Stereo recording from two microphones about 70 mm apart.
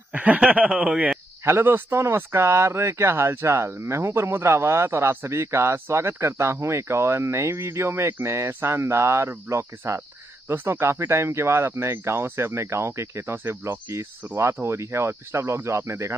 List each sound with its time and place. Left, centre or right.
0.1 s speech: right
1.4 s speech: right